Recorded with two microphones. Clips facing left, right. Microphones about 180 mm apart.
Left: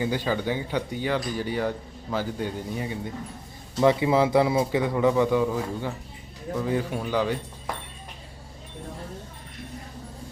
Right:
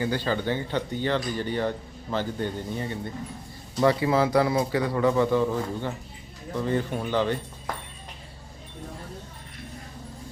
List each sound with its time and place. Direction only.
0.0 s speech: 15° left (ahead or behind)